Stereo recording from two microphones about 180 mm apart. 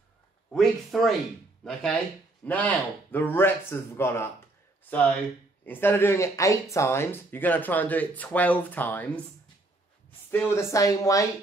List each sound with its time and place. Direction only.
0.5 s a man's voice: centre (ahead or behind)
10.3 s speech: 15° left (ahead or behind)